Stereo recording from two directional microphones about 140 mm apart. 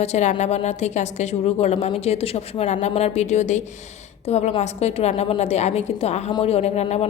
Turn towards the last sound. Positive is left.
turn(degrees=50)  # may be behind; listen again after turning